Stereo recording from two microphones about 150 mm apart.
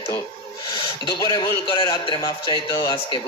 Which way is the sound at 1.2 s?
30° left (ahead or behind).